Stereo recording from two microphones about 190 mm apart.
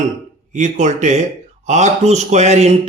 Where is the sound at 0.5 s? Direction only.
40° right (ahead or behind).